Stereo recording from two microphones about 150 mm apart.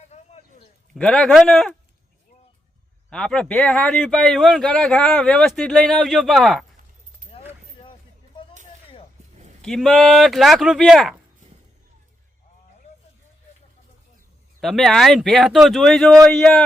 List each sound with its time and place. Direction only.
0.1 s a sound: 45° left (ahead or behind)
0.9 s speech: 5° left (ahead or behind)
3.1 s speech: 5° left (ahead or behind)
9.6 s speech: 5° left (ahead or behind)
14.6 s speech: centre (ahead or behind)